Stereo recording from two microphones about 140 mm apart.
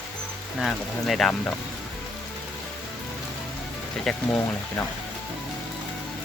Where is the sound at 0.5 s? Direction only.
Centre (ahead or behind).